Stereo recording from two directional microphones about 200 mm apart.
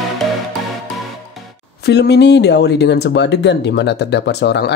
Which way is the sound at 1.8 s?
55° left (ahead or behind).